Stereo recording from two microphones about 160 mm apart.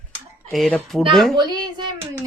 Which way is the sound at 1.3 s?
25° right (ahead or behind).